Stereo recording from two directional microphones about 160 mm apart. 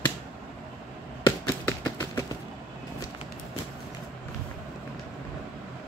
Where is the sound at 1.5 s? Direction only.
10° left (ahead or behind).